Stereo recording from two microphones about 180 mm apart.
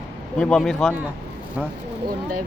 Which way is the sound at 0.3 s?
5° left (ahead or behind).